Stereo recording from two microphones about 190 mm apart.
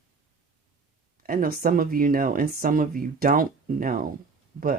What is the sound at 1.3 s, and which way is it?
Speech, 50° right (ahead or behind).